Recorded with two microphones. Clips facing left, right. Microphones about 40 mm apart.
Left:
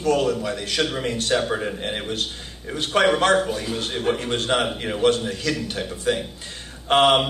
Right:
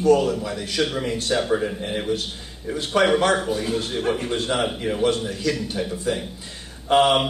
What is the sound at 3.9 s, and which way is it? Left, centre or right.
Speech, centre.